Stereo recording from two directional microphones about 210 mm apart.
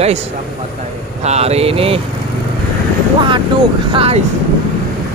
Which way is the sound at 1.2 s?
30° right (ahead or behind).